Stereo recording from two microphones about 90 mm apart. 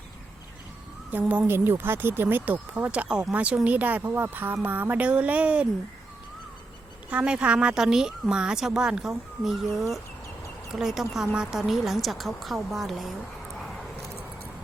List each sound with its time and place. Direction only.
1.3 s speech: 20° right (ahead or behind)
7.1 s speech: 10° right (ahead or behind)
13.6 s a sound: centre (ahead or behind)